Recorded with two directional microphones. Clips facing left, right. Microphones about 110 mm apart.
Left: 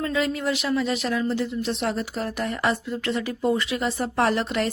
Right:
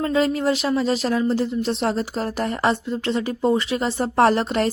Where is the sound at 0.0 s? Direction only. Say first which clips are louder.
Right 5 dB; 35° right (ahead or behind).